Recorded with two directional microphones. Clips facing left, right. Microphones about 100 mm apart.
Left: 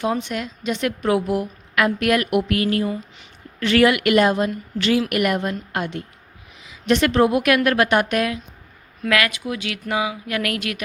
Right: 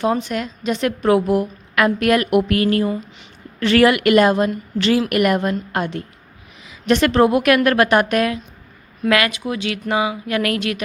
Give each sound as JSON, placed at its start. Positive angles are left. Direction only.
{"t": 0.0, "sound": "a woman's voice", "side_deg": -40}
{"t": 4.8, "sound": "a woman's voice", "side_deg": -40}
{"t": 6.7, "sound": "a woman's voice", "side_deg": -50}
{"t": 9.0, "sound": "a woman's voice", "side_deg": -25}